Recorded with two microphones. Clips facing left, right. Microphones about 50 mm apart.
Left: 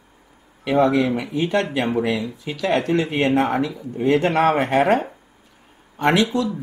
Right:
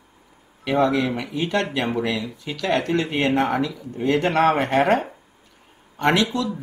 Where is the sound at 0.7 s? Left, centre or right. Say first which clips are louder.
Left 2 dB; centre.